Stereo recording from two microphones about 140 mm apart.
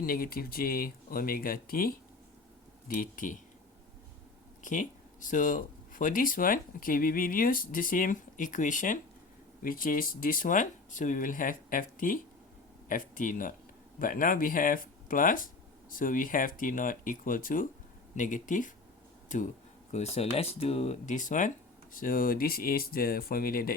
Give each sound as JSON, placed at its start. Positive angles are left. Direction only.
{"t": 0.0, "sound": "speech", "side_deg": 90}
{"t": 2.8, "sound": "speech", "side_deg": 80}
{"t": 4.6, "sound": "speech", "side_deg": 65}
{"t": 9.6, "sound": "speech", "side_deg": 85}
{"t": 19.9, "sound": "speech", "side_deg": 50}
{"t": 21.9, "sound": "speech", "side_deg": 75}